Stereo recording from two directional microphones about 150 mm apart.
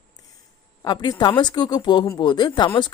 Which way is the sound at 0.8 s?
30° left (ahead or behind).